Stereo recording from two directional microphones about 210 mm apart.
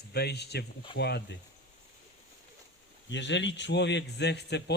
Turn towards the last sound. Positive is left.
turn(degrees=55)  # may be behind; listen again after turning